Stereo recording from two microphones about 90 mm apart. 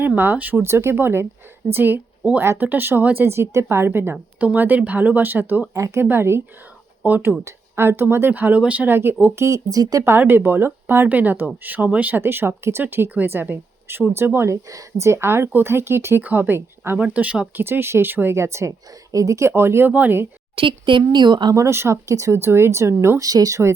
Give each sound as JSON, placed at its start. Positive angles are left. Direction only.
{"t": 0.2, "sound": "a woman's voice", "side_deg": -20}
{"t": 5.7, "sound": "speech", "side_deg": -35}
{"t": 9.2, "sound": "speech", "side_deg": -30}
{"t": 10.0, "sound": "speech", "side_deg": -25}
{"t": 17.0, "sound": "speech", "side_deg": -15}
{"t": 17.5, "sound": "speech", "side_deg": -25}
{"t": 20.6, "sound": "speech", "side_deg": -65}
{"t": 21.5, "sound": "speech", "side_deg": -30}